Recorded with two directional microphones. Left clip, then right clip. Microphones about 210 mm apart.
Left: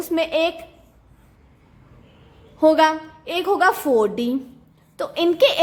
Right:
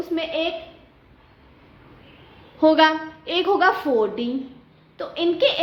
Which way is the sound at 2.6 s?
30° left (ahead or behind).